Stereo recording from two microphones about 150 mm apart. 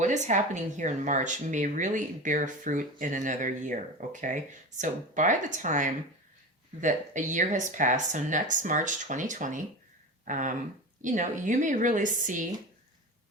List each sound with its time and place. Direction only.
0.0 s speech: 55° right (ahead or behind)